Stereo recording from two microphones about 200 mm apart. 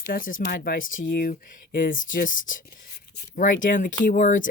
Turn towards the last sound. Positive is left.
turn(degrees=40)  # may be behind; listen again after turning